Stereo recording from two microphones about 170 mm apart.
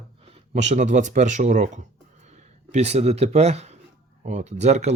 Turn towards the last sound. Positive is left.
turn(degrees=-40)  # may be behind; listen again after turning